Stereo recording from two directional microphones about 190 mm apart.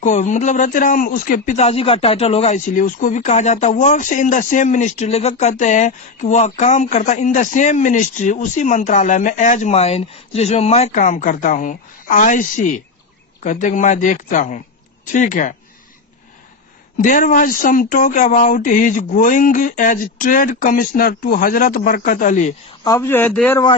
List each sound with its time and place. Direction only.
0.0 s speech: 40° left (ahead or behind)
17.0 s speech: 45° left (ahead or behind)
22.8 s a man's voice: 15° left (ahead or behind)